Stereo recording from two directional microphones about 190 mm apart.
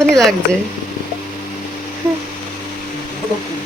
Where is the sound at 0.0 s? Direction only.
Centre (ahead or behind).